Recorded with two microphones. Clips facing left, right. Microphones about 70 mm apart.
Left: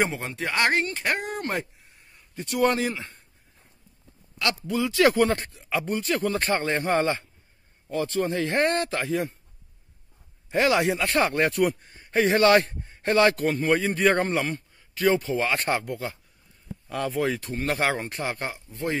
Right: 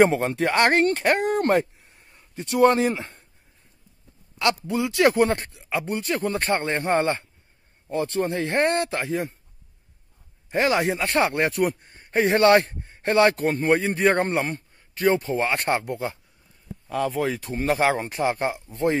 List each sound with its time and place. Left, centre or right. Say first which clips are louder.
0.0 s speech: right 8 dB; right
2.1 s a man's voice: right 5 dB; right
4.4 s speech: right 3 dB; right
6.3 s speech: right 1 dB; centre
6.6 s speech: right 1 dB; right
10.5 s speech: even; centre
12.1 s a man's voice: right 2 dB; right
15.9 s speech: right 3 dB; right
16.9 s speech: right 2 dB; centre; by 18.9 s right